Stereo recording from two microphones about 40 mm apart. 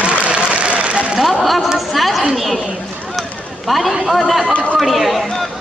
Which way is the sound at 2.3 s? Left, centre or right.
Centre.